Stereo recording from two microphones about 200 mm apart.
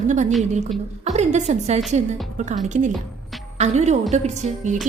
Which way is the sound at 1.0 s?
35° right (ahead or behind).